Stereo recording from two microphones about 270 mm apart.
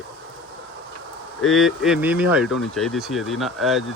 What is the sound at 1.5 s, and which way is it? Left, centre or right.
Speech, centre.